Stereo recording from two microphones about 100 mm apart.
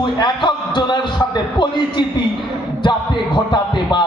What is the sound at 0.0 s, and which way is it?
A man's voice, 50° left (ahead or behind).